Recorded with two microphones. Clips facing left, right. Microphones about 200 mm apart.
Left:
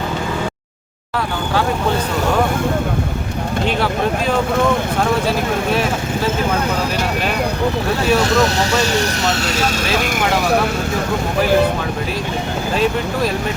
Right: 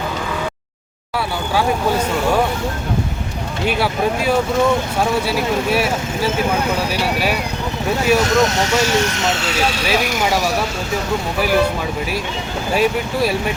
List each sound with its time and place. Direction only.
5.2 s speech: 10° right (ahead or behind)
8.0 s speech: 35° left (ahead or behind)
10.0 s speech: 55° left (ahead or behind)
12.7 s speech: 10° right (ahead or behind)